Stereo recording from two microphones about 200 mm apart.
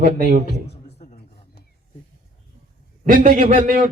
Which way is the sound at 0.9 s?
40° left (ahead or behind).